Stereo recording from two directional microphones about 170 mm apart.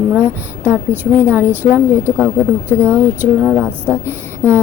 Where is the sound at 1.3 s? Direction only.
10° right (ahead or behind).